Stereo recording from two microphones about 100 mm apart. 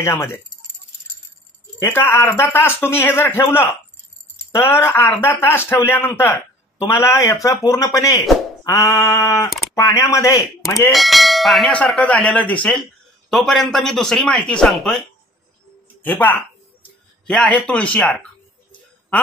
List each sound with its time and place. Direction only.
0.0 s speech: 25° left (ahead or behind)
1.8 s speech: 25° left (ahead or behind)
6.9 s speech: 30° left (ahead or behind)
7.4 s a sound: 30° left (ahead or behind)
10.9 s speech: centre (ahead or behind)
11.7 s a man's voice: 10° left (ahead or behind)
16.0 s speech: 15° left (ahead or behind)